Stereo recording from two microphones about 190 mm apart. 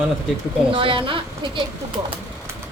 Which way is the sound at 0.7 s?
25° right (ahead or behind).